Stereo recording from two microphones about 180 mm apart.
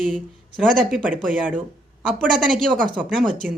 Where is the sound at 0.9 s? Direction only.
5° right (ahead or behind).